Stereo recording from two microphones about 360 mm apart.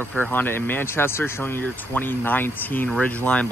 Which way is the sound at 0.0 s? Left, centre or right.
Centre.